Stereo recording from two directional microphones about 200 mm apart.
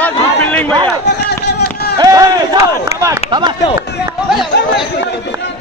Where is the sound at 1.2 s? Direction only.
55° left (ahead or behind).